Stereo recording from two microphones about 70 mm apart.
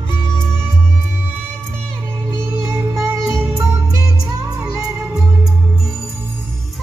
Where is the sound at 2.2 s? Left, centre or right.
Right.